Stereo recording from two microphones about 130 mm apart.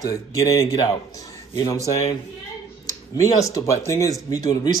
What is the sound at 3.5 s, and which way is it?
Speech, 25° left (ahead or behind).